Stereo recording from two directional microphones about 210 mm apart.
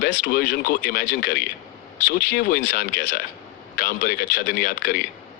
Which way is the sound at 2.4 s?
40° left (ahead or behind).